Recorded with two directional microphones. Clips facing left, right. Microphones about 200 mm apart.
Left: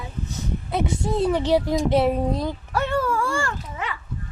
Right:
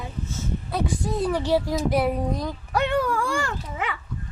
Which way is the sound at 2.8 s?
15° right (ahead or behind).